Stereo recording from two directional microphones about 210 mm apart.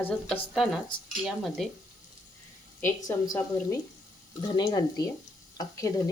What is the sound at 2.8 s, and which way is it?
Speech, 15° left (ahead or behind).